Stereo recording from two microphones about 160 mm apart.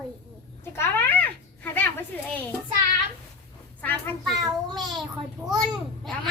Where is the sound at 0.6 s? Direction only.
15° left (ahead or behind).